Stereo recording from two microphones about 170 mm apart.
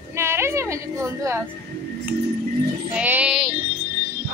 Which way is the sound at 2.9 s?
10° right (ahead or behind).